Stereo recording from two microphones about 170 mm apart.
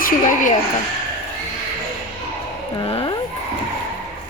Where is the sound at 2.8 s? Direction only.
35° left (ahead or behind).